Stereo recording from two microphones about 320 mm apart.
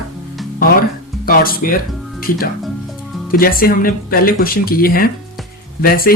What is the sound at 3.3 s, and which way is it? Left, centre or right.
Speech, left.